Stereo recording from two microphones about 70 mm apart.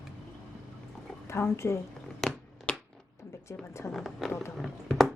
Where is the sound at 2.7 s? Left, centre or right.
Centre.